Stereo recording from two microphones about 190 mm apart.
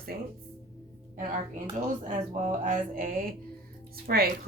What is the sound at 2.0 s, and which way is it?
A woman's voice, 45° right (ahead or behind).